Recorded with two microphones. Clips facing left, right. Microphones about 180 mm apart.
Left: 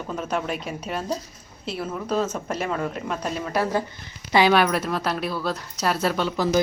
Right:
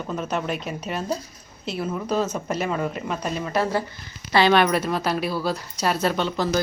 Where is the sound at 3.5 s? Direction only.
10° left (ahead or behind).